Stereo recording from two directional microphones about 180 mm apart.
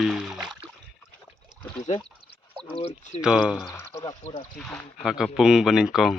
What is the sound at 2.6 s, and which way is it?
Speech, 35° left (ahead or behind).